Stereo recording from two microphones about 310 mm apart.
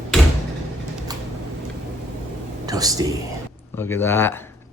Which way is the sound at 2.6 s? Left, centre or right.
Centre.